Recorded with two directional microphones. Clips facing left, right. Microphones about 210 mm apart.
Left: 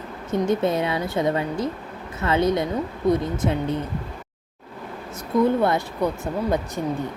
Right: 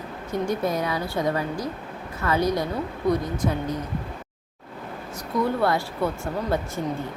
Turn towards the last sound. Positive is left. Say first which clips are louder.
# left 2 dB
turn(degrees=15)  # may be behind; listen again after turning